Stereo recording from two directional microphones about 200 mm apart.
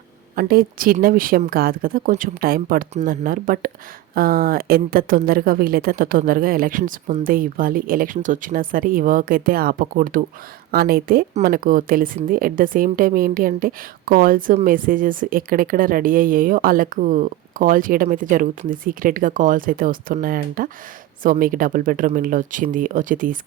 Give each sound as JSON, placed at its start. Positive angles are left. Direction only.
{"t": 0.3, "sound": "a woman's voice", "side_deg": -45}